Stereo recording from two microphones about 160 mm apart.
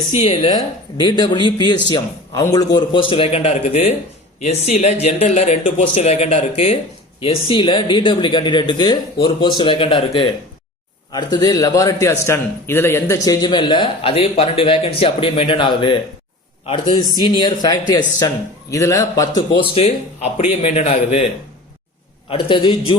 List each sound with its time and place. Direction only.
0.1 s a man's voice: 40° left (ahead or behind)
0.5 s a man's voice: 30° left (ahead or behind)
19.4 s a man's voice: 40° left (ahead or behind)
22.3 s a man's voice: 30° left (ahead or behind)